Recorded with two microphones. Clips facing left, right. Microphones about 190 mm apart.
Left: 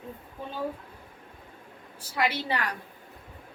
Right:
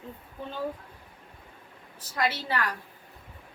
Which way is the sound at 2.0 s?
10° left (ahead or behind).